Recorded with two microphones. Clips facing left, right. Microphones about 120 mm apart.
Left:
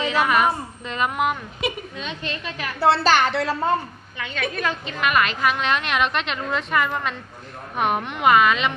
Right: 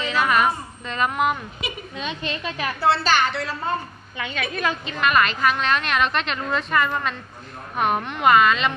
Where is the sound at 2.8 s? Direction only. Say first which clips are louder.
Left 2 dB; 80° left.